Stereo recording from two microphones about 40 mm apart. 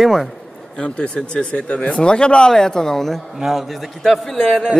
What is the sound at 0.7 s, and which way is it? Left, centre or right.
Speech, left.